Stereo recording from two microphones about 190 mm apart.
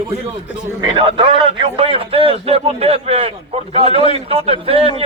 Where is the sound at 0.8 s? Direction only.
25° right (ahead or behind).